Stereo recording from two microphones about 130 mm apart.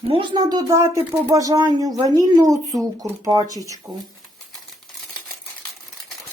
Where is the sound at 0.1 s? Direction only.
40° right (ahead or behind).